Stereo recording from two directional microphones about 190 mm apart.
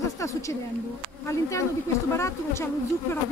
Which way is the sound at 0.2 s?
15° left (ahead or behind).